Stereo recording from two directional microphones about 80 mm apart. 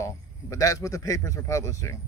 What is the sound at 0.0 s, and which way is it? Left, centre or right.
Speech, left.